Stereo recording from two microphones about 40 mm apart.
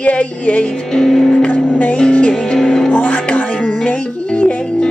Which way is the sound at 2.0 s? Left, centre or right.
Left.